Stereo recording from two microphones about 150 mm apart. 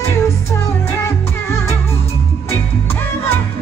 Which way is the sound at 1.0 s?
15° left (ahead or behind).